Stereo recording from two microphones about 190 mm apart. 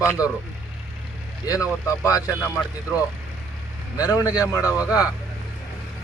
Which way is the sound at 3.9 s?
20° left (ahead or behind).